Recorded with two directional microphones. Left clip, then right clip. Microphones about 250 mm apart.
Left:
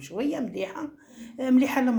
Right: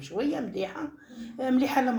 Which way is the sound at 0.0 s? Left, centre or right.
Left.